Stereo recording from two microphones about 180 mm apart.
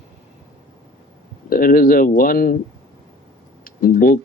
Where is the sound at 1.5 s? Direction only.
55° left (ahead or behind).